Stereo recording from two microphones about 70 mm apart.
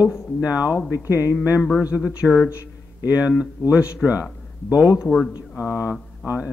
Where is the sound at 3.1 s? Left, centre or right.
Right.